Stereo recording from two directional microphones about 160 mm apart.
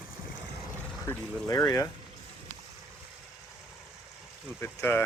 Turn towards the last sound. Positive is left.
turn(degrees=15)  # may be behind; listen again after turning